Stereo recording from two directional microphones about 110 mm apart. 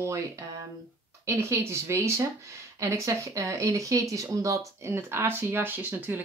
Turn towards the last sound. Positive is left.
turn(degrees=-15)  # may be behind; listen again after turning